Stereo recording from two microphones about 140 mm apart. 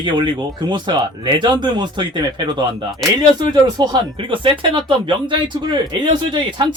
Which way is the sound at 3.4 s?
30° right (ahead or behind).